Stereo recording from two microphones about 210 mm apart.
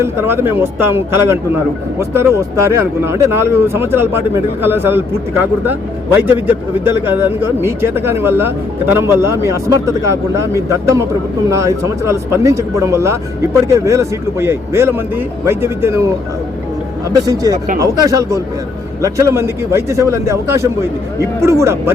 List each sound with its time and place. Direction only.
0.0 s speech: 10° right (ahead or behind)